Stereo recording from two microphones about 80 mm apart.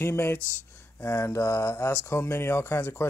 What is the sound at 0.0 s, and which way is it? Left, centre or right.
Speech, left.